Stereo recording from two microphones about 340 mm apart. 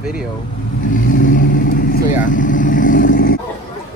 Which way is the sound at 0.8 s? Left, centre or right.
Left.